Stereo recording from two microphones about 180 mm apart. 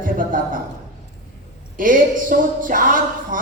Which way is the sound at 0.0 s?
50° right (ahead or behind).